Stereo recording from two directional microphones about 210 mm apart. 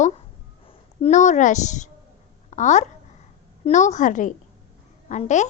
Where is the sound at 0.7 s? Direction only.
30° left (ahead or behind).